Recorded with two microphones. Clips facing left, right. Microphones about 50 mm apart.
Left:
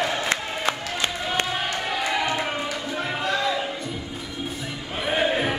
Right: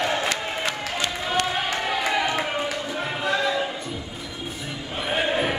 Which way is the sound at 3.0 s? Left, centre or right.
Centre.